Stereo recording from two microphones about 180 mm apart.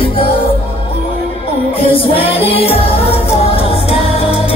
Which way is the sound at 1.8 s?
30° left (ahead or behind).